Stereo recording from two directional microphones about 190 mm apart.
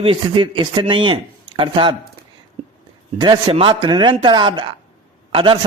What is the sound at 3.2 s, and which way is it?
A man's voice, 20° right (ahead or behind).